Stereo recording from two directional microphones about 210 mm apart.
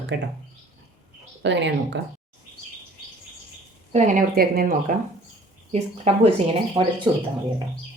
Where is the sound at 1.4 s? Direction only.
60° right (ahead or behind).